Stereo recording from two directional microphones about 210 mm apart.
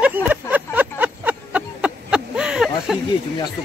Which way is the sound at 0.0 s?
10° right (ahead or behind).